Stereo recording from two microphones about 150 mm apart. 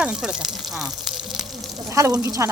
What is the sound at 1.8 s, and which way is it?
Speech, 20° right (ahead or behind).